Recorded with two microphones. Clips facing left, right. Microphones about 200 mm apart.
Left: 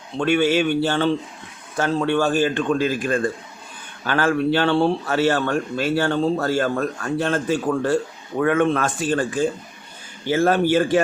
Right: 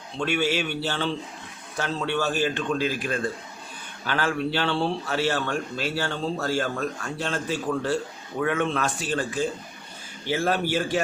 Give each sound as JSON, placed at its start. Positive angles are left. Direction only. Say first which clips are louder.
{"t": 0.2, "sound": "speech", "louder": "left 7 dB", "side_deg": 50}